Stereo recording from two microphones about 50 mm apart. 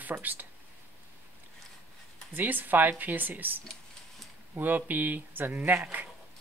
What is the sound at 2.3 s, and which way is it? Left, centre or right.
Speech, right.